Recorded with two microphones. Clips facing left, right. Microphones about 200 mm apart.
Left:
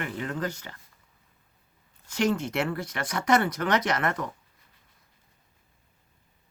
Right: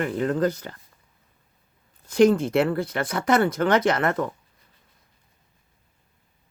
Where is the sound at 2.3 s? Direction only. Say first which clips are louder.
Right 7 dB; 30° right (ahead or behind).